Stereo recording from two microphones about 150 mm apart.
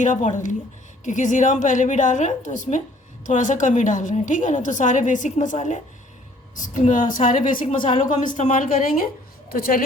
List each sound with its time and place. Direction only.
0.0 s a woman's voice: 55° left (ahead or behind)
9.5 s a woman's voice: 75° left (ahead or behind)